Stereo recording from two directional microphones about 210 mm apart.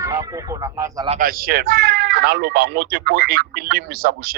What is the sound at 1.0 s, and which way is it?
Speech, 40° right (ahead or behind).